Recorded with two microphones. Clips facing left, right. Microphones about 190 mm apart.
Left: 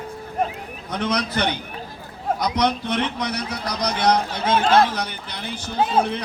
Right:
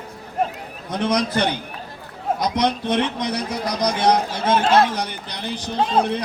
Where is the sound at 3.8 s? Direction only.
10° right (ahead or behind).